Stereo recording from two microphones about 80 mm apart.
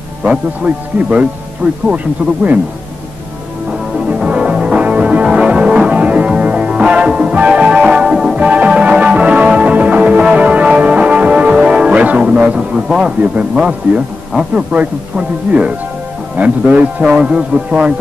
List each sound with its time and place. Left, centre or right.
0.2 s a man's voice: centre
4.1 s music: centre
16.3 s a man's voice: centre